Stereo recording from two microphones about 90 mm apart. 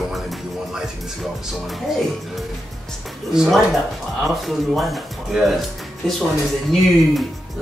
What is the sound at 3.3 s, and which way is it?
Speech, 5° right (ahead or behind).